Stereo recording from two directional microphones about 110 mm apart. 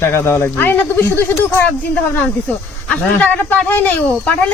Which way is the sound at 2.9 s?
15° left (ahead or behind).